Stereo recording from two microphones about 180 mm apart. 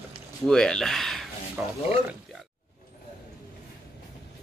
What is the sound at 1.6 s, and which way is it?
Speech, 10° right (ahead or behind).